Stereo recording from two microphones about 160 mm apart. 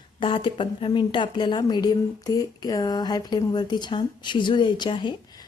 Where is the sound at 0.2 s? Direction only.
30° left (ahead or behind).